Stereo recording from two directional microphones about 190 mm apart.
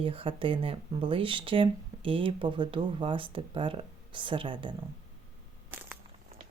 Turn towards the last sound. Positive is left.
turn(degrees=-25)  # may be behind; listen again after turning